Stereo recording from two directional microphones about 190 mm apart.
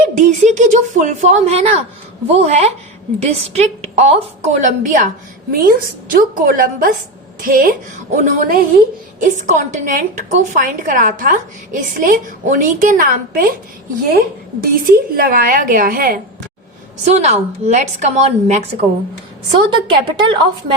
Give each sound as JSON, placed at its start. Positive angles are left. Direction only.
{"t": 0.0, "sound": "a woman's voice", "side_deg": -40}
{"t": 17.2, "sound": "a woman's voice", "side_deg": -35}
{"t": 19.9, "sound": "a woman's voice", "side_deg": -30}